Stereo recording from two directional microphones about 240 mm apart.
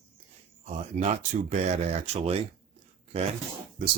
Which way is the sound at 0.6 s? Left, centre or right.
Right.